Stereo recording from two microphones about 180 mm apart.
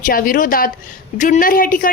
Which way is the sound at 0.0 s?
50° left (ahead or behind).